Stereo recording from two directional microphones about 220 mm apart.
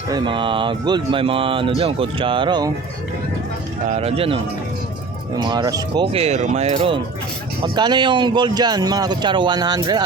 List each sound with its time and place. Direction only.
0.1 s speech: 20° right (ahead or behind)
3.8 s speech: 30° right (ahead or behind)
5.4 s speech: 20° right (ahead or behind)